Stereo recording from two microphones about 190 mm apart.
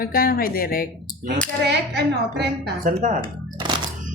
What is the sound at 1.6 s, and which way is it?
A woman's voice, 60° right (ahead or behind).